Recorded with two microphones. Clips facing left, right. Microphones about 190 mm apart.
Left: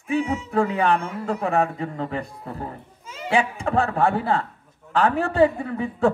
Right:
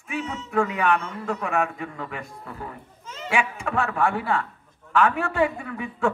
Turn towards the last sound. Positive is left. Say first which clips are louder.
# left 5 dB
turn(degrees=35)  # may be behind; listen again after turning